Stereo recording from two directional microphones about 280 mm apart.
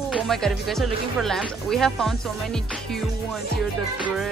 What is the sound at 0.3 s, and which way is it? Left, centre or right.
Speech, centre.